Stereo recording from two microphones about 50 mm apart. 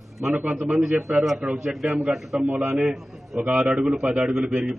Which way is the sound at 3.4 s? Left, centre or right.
Right.